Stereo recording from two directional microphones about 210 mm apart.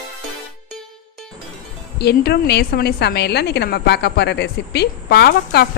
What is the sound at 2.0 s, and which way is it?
A woman's voice, 50° left (ahead or behind).